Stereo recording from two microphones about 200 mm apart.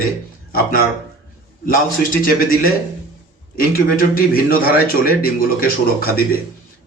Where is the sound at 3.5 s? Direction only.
45° left (ahead or behind).